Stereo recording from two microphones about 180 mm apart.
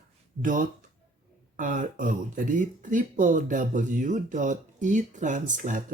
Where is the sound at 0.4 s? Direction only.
45° right (ahead or behind).